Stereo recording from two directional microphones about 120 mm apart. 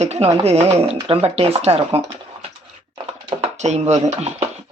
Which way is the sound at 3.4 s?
70° right (ahead or behind).